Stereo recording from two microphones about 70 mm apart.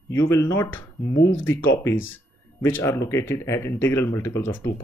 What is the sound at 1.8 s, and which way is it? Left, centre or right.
Speech, left.